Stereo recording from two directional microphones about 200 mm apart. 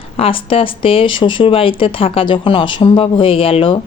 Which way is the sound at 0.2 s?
25° left (ahead or behind).